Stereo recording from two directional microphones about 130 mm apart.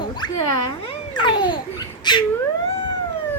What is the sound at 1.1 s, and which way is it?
Babbling, 35° left (ahead or behind).